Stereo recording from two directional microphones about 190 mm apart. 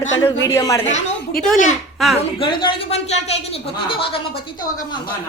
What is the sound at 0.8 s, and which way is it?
Speech, 45° left (ahead or behind).